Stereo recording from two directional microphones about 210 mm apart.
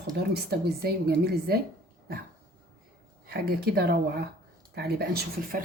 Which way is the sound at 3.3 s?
50° right (ahead or behind).